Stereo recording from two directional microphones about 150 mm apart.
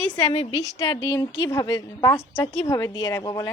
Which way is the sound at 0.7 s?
25° left (ahead or behind).